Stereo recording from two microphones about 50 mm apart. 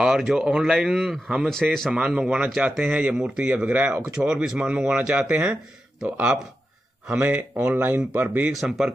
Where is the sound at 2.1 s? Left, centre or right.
Right.